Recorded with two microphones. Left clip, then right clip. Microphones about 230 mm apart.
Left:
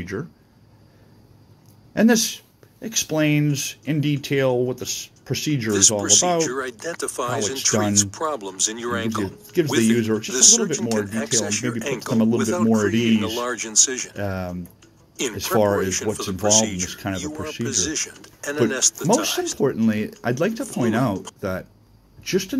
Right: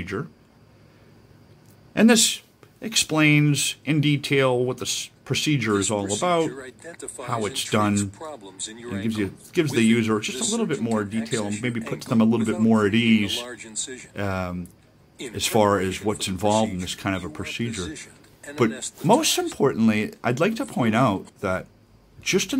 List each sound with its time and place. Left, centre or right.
0.0 s speech: centre
2.0 s speech: centre
8.4 s speech: left
8.7 s speech: centre
17.8 s speech: left
18.4 s speech: centre